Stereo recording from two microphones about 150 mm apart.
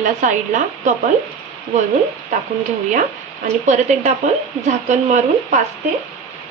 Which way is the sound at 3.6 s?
50° right (ahead or behind).